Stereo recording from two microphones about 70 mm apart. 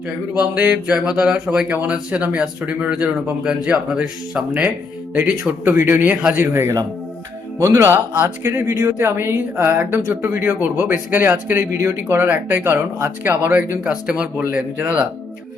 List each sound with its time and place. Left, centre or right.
0.3 s speech: centre
5.1 s speech: right